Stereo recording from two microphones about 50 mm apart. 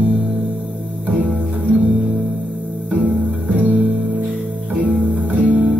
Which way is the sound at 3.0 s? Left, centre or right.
Right.